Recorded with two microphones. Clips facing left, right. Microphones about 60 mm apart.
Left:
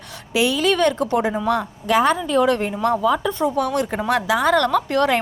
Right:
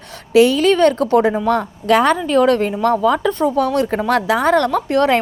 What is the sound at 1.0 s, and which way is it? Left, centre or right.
Speech, right.